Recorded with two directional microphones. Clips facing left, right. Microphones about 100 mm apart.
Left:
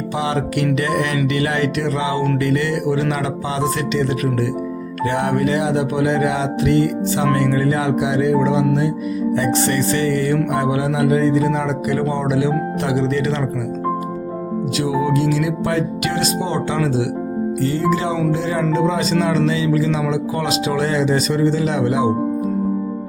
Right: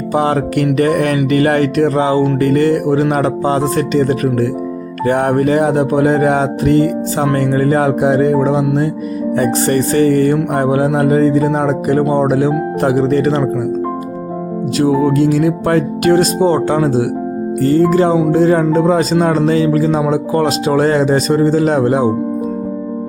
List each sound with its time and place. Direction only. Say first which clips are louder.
0.1 s speech: right 7 dB; 45° right (ahead or behind)
14.8 s speech: right 7 dB; 45° right (ahead or behind)